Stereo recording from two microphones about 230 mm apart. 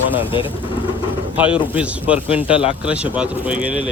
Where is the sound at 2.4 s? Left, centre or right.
Left.